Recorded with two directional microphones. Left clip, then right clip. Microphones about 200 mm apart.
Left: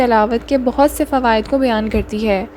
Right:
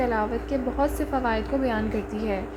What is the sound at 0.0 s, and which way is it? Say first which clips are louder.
A woman's voice: left 12 dB; 45° left (ahead or behind).